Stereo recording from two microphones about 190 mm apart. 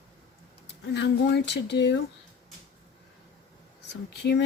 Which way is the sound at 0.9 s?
65° left (ahead or behind).